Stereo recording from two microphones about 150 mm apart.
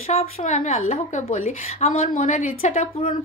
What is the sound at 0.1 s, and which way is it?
A woman's voice, 50° left (ahead or behind).